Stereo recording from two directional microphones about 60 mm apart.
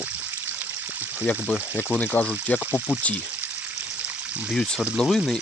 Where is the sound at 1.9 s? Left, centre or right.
Left.